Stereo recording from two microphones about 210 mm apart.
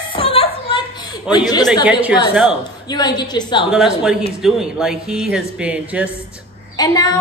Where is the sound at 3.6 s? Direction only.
Centre (ahead or behind).